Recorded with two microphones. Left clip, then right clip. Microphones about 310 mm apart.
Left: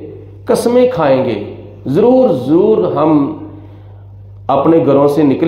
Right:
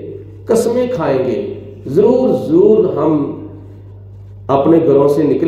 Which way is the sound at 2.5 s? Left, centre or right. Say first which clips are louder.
Even; left.